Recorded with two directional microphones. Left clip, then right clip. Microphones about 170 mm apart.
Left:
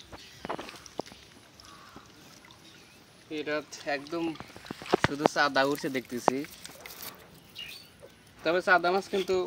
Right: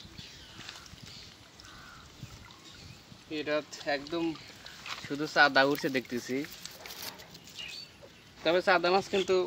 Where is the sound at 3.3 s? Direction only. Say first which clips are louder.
Right 1 dB; 5° left (ahead or behind); by 6.4 s 10° right (ahead or behind).